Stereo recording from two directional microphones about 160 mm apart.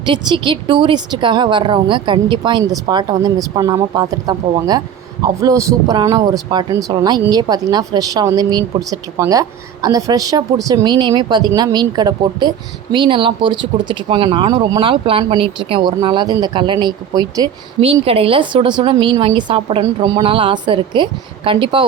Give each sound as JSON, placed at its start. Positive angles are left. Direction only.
{"t": 0.0, "sound": "speech", "side_deg": -30}
{"t": 17.7, "sound": "a woman's voice", "side_deg": -35}